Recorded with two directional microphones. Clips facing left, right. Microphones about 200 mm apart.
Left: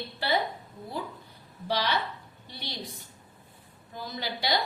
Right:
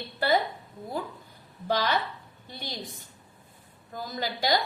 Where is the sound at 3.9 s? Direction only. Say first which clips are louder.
Right 2 dB; 45° right (ahead or behind).